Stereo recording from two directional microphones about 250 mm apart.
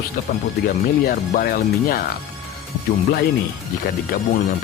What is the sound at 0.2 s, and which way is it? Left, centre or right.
Speech, left.